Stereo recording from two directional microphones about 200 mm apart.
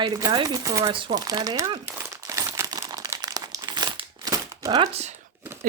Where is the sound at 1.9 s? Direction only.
15° right (ahead or behind).